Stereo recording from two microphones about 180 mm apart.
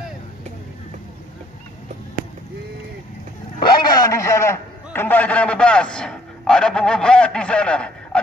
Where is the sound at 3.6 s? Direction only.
25° left (ahead or behind).